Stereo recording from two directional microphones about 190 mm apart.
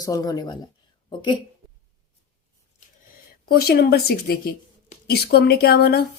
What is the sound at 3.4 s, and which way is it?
A woman's voice, 55° left (ahead or behind).